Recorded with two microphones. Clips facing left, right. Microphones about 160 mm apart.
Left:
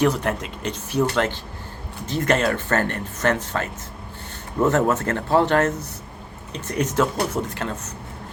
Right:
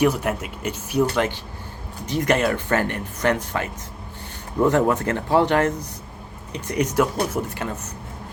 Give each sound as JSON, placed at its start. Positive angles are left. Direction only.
{"t": 0.0, "sound": "speech", "side_deg": -10}